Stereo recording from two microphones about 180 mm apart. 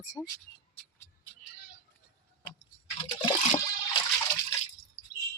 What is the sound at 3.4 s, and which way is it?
Toilet flush, 35° left (ahead or behind).